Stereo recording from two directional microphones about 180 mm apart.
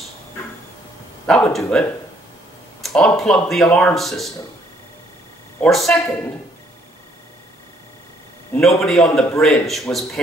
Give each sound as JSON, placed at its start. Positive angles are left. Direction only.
{"t": 1.2, "sound": "speech", "side_deg": 5}
{"t": 5.6, "sound": "speech", "side_deg": 0}
{"t": 8.5, "sound": "speech", "side_deg": 0}